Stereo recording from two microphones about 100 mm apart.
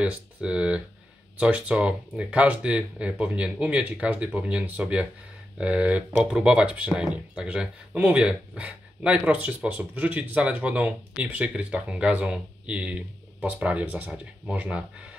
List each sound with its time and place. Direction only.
0.0 s speech: 10° right (ahead or behind)